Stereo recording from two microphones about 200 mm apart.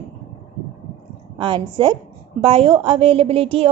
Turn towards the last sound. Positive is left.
turn(degrees=-30)  # may be behind; listen again after turning